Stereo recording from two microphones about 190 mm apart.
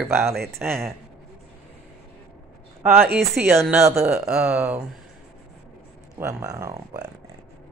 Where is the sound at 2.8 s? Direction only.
50° right (ahead or behind).